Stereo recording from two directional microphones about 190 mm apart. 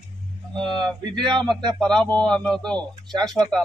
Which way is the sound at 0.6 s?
5° left (ahead or behind).